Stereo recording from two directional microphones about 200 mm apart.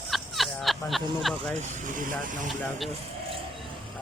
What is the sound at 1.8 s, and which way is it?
Speech, 40° right (ahead or behind).